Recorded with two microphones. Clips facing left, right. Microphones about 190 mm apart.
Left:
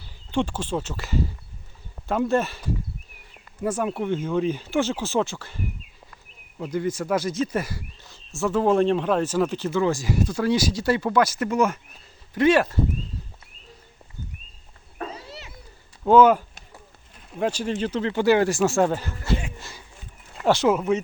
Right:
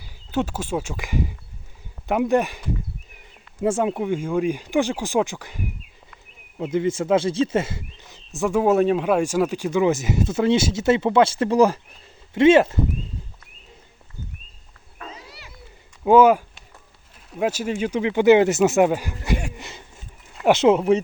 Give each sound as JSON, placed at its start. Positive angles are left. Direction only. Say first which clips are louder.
{"t": 0.3, "sound": "speech", "louder": "right 1 dB", "side_deg": -5}
{"t": 3.6, "sound": "speech", "louder": "right 4 dB", "side_deg": -25}
{"t": 15.3, "sound": "cat", "louder": "left 5 dB", "side_deg": 20}
{"t": 16.0, "sound": "speech", "louder": "right 1 dB", "side_deg": -10}
{"t": 19.5, "sound": "a sound", "louder": "right 3 dB", "side_deg": -20}
{"t": 20.4, "sound": "speech", "louder": "right 4 dB", "side_deg": -20}